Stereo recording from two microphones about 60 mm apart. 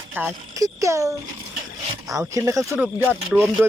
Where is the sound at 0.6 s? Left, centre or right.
Right.